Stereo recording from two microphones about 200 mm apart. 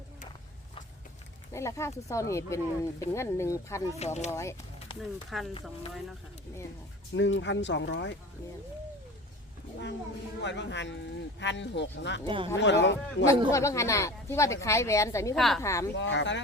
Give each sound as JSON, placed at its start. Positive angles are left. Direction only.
{"t": 1.5, "sound": "speech", "side_deg": 15}
{"t": 3.9, "sound": "speech", "side_deg": 35}
{"t": 4.3, "sound": "speech", "side_deg": 15}
{"t": 4.9, "sound": "speech", "side_deg": 0}
{"t": 7.1, "sound": "speech", "side_deg": 65}
{"t": 10.4, "sound": "speech", "side_deg": 60}
{"t": 12.2, "sound": "speech", "side_deg": -25}
{"t": 12.5, "sound": "speech", "side_deg": 65}
{"t": 13.5, "sound": "speech", "side_deg": 15}
{"t": 15.4, "sound": "speech", "side_deg": 0}
{"t": 15.6, "sound": "speech", "side_deg": 15}
{"t": 16.0, "sound": "speech", "side_deg": 65}